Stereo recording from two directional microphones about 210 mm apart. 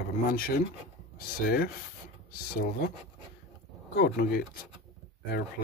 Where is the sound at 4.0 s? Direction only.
45° left (ahead or behind).